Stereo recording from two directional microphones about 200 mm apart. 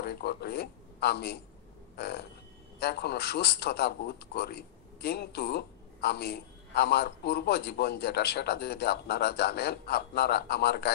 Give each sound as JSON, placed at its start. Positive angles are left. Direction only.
{"t": 0.0, "sound": "a man's voice", "side_deg": 55}
{"t": 2.0, "sound": "a sound", "side_deg": 55}
{"t": 2.8, "sound": "a man's voice", "side_deg": 55}